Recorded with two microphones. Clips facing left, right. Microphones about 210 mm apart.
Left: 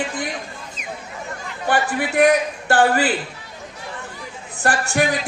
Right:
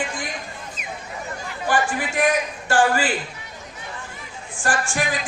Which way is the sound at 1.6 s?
60° left (ahead or behind).